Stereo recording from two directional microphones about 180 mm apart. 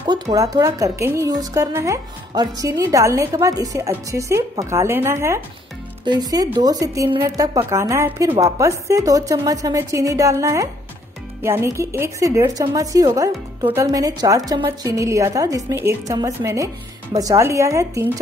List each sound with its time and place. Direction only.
0.0 s speech: 25° right (ahead or behind)